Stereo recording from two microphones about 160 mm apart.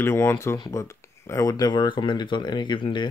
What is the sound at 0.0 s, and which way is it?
Speech, 15° left (ahead or behind).